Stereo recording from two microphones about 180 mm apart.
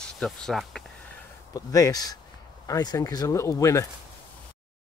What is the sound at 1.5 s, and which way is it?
Speech, 20° left (ahead or behind).